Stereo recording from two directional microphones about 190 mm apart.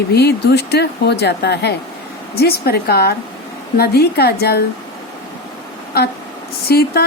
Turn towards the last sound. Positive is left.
turn(degrees=55)  # may be behind; listen again after turning